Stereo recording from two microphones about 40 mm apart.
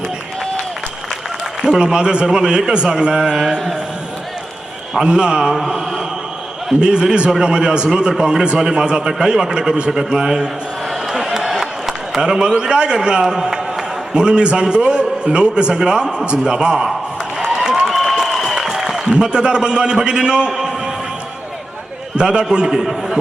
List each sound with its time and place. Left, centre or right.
1.6 s a man's voice: centre
5.0 s a man's voice: right
5.4 s a man's voice: centre
6.7 s a man's voice: right
11.1 s a sound: centre
12.1 s a man's voice: centre
17.4 s applause: centre
17.8 s a sound: centre
19.2 s a man's voice: right
22.2 s a man's voice: right
22.6 s a man's voice: centre